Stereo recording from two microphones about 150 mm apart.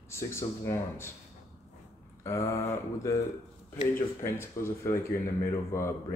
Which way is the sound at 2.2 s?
20° left (ahead or behind).